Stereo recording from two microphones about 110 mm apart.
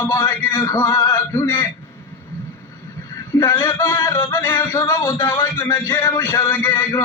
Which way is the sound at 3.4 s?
25° left (ahead or behind).